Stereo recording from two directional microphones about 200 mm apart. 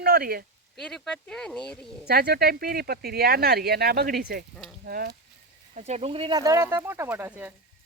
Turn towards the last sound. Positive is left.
turn(degrees=-10)  # may be behind; listen again after turning